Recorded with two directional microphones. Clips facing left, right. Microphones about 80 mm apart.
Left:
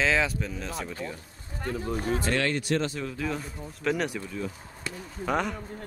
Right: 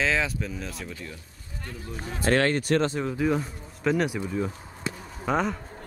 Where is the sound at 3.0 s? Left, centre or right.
Right.